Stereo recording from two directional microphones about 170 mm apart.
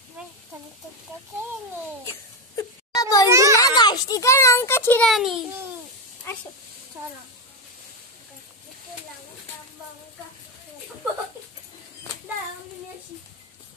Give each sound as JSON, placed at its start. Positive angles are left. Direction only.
{"t": 2.5, "sound": "wail", "side_deg": 20}
{"t": 3.3, "sound": "children playing", "side_deg": -20}
{"t": 3.5, "sound": "a child's voice", "side_deg": 20}
{"t": 5.1, "sound": "a child's voice", "side_deg": 0}
{"t": 6.3, "sound": "a sound", "side_deg": 15}